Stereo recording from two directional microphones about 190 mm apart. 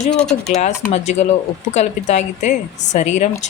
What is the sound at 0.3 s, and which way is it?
A woman's voice, 35° left (ahead or behind).